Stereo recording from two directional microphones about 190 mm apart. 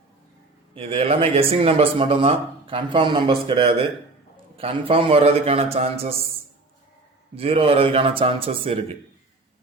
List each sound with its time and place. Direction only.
0.8 s a man's voice: 30° right (ahead or behind)
7.3 s speech: 30° right (ahead or behind)